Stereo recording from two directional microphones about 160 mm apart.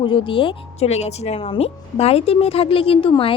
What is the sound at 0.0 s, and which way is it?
A woman's voice, 30° left (ahead or behind).